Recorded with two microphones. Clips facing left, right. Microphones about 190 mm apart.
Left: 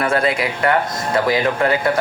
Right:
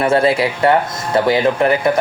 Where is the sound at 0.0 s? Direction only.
25° right (ahead or behind).